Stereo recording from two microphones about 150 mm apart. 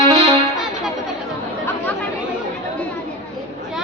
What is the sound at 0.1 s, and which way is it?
Music, 40° right (ahead or behind).